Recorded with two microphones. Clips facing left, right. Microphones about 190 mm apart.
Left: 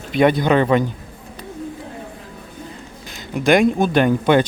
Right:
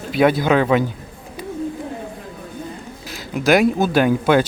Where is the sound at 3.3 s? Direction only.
5° right (ahead or behind).